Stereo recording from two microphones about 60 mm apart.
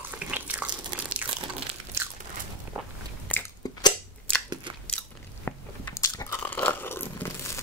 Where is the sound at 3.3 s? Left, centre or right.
Left.